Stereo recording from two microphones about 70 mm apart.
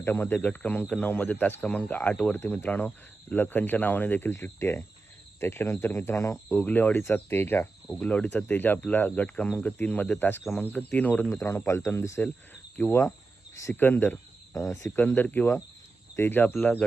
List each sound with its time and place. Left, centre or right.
0.0 s speech: left
7.9 s cricket: centre
8.1 s speech: centre
11.3 s speech: left
14.5 s speech: left
14.9 s speech: left